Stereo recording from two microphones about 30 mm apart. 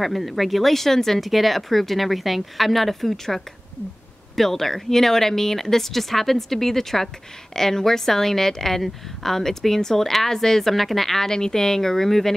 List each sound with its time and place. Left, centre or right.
0.0 s a woman's voice: centre
1.2 s a woman's voice: centre
10.7 s a woman's voice: centre
11.2 s a woman's voice: left